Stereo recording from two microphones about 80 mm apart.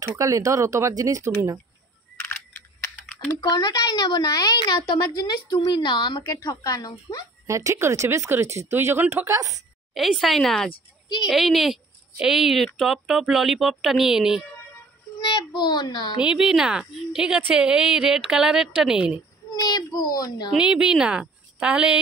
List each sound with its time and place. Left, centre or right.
0.2 s speech: right
3.4 s a woman's voice: left
5.2 s speech: left
6.2 s speech: left
7.4 s speech: right
9.9 s a woman's voice: centre
15.1 s a woman's voice: left
16.2 s a woman's voice: centre
19.5 s a woman's voice: left
20.5 s a woman's voice: centre